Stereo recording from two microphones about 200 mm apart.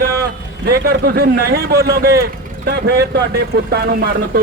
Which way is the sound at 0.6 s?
55° right (ahead or behind).